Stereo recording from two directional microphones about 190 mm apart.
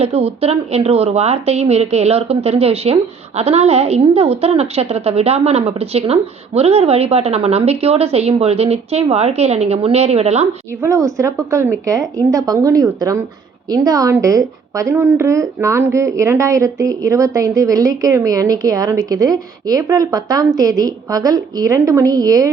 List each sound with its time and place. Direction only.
0.0 s a woman's voice: 30° right (ahead or behind)
10.8 s a woman's voice: 15° right (ahead or behind)